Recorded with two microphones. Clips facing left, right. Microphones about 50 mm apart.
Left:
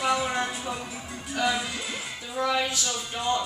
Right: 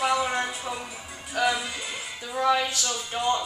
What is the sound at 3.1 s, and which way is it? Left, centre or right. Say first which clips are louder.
Music: right 2 dB; centre.